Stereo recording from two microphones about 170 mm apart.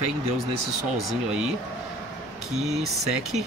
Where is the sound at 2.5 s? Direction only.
40° right (ahead or behind).